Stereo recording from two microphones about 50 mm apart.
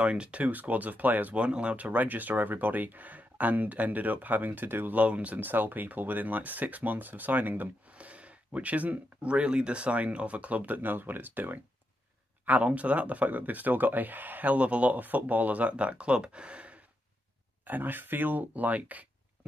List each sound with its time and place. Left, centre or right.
0.0 s speech: right
1.3 s speech: right
5.0 s speech: right
7.9 s a sound: right
9.3 s speech: right
12.4 s speech: right
17.6 s speech: right